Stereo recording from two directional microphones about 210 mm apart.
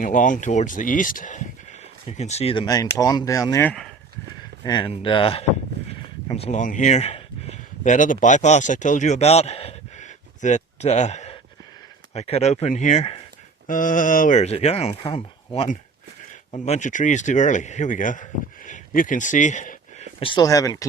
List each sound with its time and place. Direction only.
0.0 s speech: 40° left (ahead or behind); by 3.8 s 10° left (ahead or behind)
4.6 s speech: 20° left (ahead or behind)